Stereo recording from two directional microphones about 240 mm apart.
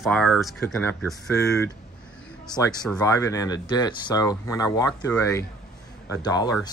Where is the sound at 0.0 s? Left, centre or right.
Centre.